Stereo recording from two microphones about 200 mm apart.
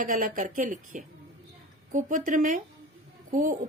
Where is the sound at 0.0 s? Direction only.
45° right (ahead or behind).